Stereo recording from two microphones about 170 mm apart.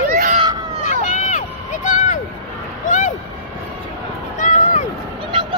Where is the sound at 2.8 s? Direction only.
50° left (ahead or behind).